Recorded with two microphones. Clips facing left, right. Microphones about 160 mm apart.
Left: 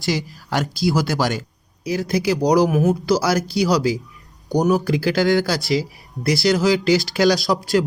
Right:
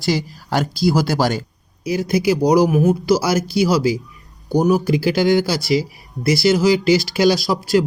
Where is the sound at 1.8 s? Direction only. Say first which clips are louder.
Right 3 dB; 10° right (ahead or behind).